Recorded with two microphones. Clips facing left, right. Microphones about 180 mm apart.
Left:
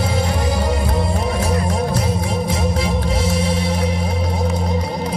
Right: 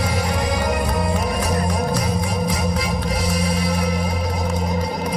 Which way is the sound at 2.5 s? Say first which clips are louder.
Left 2 dB; 25° left (ahead or behind).